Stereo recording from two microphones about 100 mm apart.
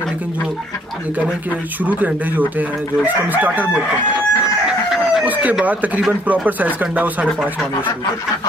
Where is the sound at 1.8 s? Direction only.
15° right (ahead or behind).